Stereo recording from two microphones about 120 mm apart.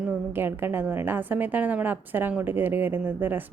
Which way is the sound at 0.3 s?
15° right (ahead or behind).